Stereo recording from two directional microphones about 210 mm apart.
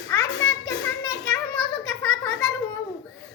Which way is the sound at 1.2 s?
5° left (ahead or behind).